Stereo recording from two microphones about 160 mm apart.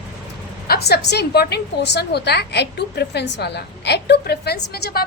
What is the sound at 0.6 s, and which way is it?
A woman's voice, 75° left (ahead or behind).